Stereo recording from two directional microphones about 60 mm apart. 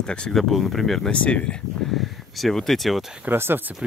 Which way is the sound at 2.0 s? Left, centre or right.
Centre.